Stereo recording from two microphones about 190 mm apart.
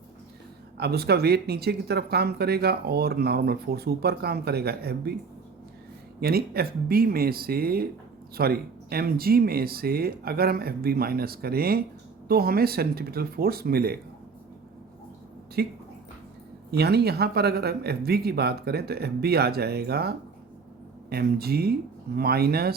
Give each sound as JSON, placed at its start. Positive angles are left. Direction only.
{"t": 0.8, "sound": "speech", "side_deg": -55}
{"t": 6.1, "sound": "speech", "side_deg": -55}
{"t": 15.6, "sound": "speech", "side_deg": -55}
{"t": 16.7, "sound": "speech", "side_deg": -60}